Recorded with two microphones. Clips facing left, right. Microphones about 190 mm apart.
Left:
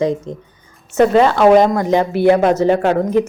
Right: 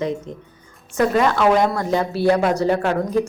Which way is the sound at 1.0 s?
25° left (ahead or behind).